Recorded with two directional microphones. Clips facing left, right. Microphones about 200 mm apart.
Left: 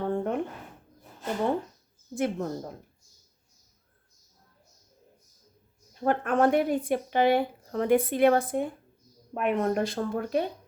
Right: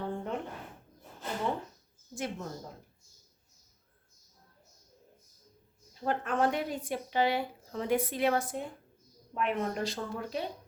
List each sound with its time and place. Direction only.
0.0 s a sound: 55° left (ahead or behind)
2.1 s speech: 55° left (ahead or behind)
5.9 s speech: 55° left (ahead or behind)